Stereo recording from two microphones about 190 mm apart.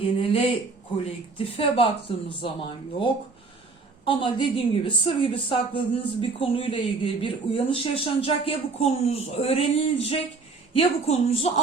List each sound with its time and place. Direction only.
0.2 s a woman's voice: 30° left (ahead or behind)